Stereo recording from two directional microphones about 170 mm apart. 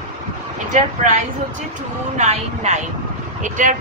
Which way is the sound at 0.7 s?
45° right (ahead or behind).